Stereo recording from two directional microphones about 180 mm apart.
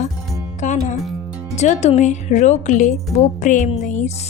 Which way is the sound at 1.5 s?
40° left (ahead or behind).